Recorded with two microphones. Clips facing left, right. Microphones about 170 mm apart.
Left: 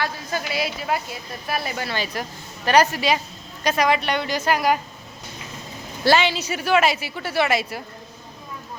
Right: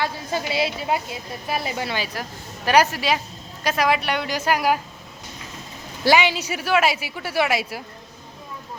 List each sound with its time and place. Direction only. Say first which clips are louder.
0.0 s a woman's voice: right 1 dB; 25° right (ahead or behind)
2.6 s a woman's voice: left 1 dB; 5° right (ahead or behind)
6.1 s a woman's voice: even; 15° right (ahead or behind)